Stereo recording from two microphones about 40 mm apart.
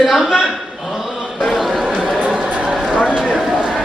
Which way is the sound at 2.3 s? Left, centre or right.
Right.